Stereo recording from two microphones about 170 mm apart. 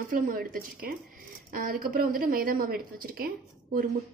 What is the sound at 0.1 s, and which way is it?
A woman's voice, 55° right (ahead or behind).